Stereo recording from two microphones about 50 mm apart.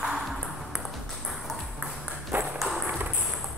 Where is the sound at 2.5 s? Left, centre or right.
Centre.